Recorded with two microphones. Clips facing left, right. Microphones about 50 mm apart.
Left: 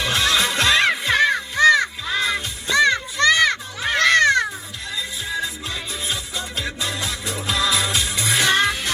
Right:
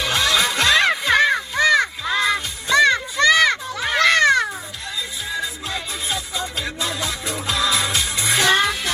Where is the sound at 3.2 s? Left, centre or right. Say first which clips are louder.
Right 1 dB; centre.